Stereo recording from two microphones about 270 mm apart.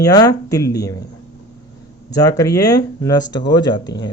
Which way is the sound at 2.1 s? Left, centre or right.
Centre.